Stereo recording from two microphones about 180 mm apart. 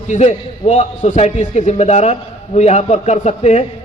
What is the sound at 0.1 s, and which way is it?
A man's voice, 40° left (ahead or behind).